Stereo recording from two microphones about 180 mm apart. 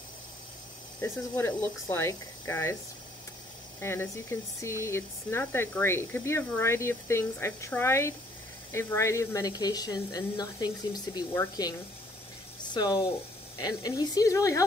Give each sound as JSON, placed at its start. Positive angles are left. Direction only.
{"t": 1.0, "sound": "speech", "side_deg": 15}
{"t": 3.8, "sound": "speech", "side_deg": 15}
{"t": 12.7, "sound": "speech", "side_deg": 20}